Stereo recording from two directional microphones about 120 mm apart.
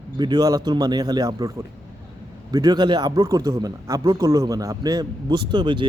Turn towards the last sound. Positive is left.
turn(degrees=-40)  # may be behind; listen again after turning